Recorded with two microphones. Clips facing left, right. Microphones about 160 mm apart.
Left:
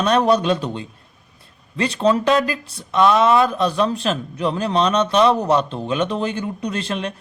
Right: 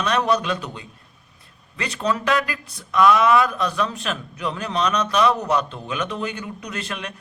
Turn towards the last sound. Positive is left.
turn(degrees=30)  # may be behind; listen again after turning